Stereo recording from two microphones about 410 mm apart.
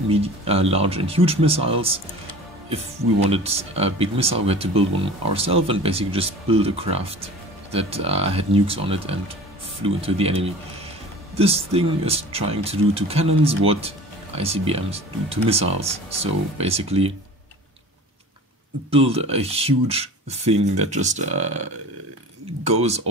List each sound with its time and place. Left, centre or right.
0.1 s speech: centre
3.3 s speech: centre
18.9 s speech: centre